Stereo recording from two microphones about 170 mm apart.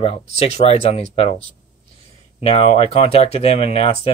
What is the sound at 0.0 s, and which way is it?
Speech, 35° left (ahead or behind).